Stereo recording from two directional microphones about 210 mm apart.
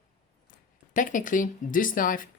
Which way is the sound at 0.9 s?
40° left (ahead or behind).